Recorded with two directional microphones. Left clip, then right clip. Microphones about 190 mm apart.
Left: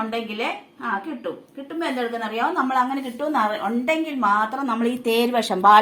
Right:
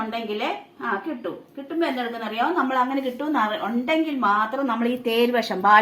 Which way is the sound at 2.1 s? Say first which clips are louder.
Even; 30° left (ahead or behind).